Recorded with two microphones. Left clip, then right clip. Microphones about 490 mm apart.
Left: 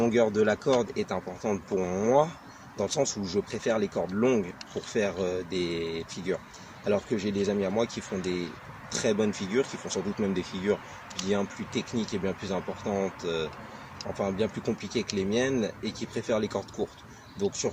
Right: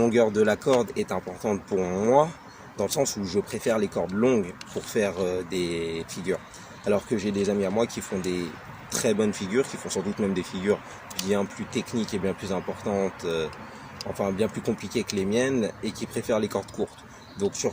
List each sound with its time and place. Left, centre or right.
0.0 s speech: left